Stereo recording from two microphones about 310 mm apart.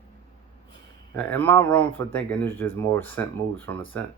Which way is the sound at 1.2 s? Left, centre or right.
Centre.